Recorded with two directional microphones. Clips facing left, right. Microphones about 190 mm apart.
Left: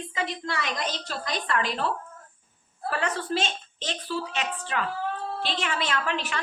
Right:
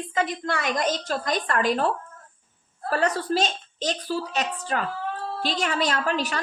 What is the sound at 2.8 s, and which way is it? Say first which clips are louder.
A woman's voice: right 4 dB; 40° right (ahead or behind).